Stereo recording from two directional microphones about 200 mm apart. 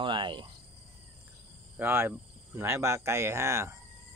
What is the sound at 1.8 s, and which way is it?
Speech, 10° right (ahead or behind).